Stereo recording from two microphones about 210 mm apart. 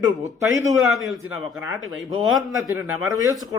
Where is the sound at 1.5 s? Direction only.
10° right (ahead or behind).